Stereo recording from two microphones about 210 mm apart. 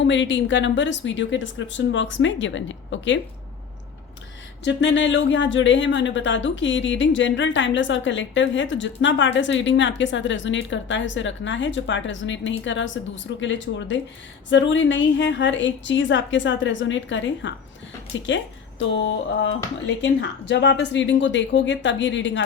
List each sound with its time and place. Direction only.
0.0 s a woman's voice: 60° left (ahead or behind)
4.6 s a woman's voice: 60° left (ahead or behind)